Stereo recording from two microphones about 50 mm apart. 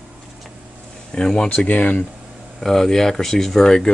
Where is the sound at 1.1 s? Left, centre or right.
Centre.